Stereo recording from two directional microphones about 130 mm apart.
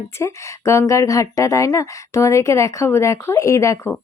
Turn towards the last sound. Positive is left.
turn(degrees=25)  # may be behind; listen again after turning